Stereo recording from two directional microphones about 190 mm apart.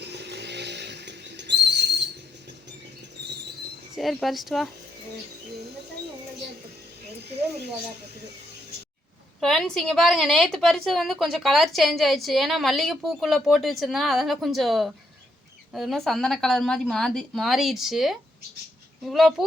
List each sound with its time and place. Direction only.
0.0 s vehicle: 60° right (ahead or behind)
3.9 s a woman's voice: centre (ahead or behind)
9.4 s a woman's voice: centre (ahead or behind)